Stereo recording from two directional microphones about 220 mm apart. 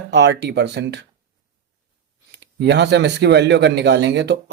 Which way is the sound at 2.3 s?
50° right (ahead or behind).